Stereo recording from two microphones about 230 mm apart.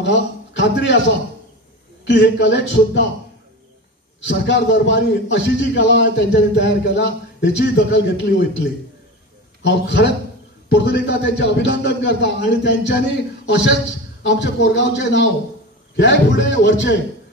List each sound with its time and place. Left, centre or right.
0.0 s a sound: left
2.0 s a man's voice: left
4.3 s a man's voice: left
9.6 s a man's voice: left
14.2 s a man's voice: left